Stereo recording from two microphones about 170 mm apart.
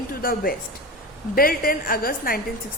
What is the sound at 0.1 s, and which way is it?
A woman's voice, 60° left (ahead or behind).